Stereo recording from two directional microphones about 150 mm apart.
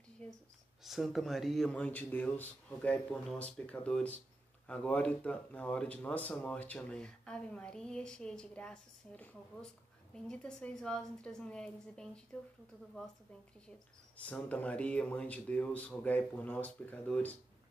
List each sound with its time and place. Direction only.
0.8 s a woman's voice: centre (ahead or behind)
13.7 s speech: 5° left (ahead or behind)